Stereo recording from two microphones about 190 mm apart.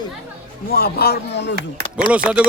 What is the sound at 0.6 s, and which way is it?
Speech, 50° left (ahead or behind).